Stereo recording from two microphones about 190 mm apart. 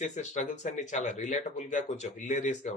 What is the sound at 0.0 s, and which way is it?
Speech, 40° left (ahead or behind).